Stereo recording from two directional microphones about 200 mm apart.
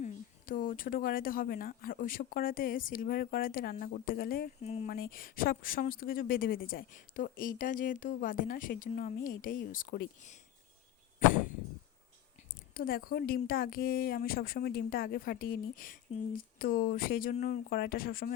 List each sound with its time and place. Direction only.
0.0 s speech: 45° left (ahead or behind)
4.6 s speech: 35° left (ahead or behind)
4.9 s speech: 50° left (ahead or behind)
12.7 s speech: 45° left (ahead or behind)